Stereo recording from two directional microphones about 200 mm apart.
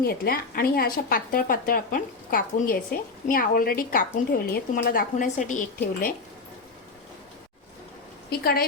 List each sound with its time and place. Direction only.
0.0 s a woman's voice: 50° left (ahead or behind)
8.3 s speech: 50° left (ahead or behind)